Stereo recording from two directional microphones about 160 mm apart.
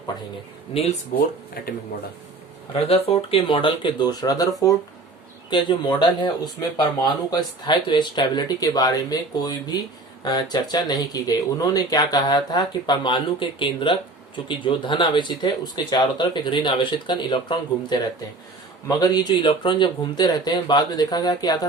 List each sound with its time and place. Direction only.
1.1 s speech: 60° left (ahead or behind)
2.7 s speech: 35° left (ahead or behind)
5.5 s speech: 30° left (ahead or behind)